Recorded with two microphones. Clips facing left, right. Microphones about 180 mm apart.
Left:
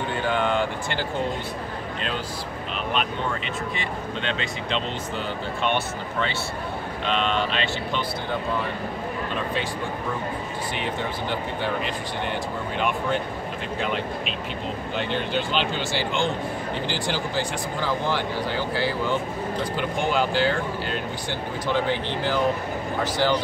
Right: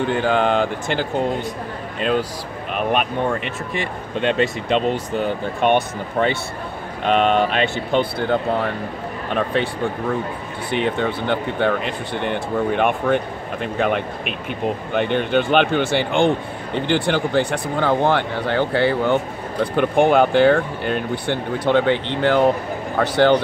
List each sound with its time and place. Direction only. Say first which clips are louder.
0.3 s speech: right 4 dB; 90° right
2.7 s speech: right 7 dB; 55° right (ahead or behind)
4.2 s speech: right 13 dB; 55° right (ahead or behind)
7.1 s speech: right 8 dB; 55° right (ahead or behind)